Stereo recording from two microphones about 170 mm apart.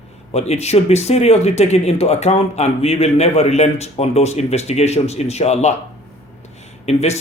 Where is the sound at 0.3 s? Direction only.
40° left (ahead or behind).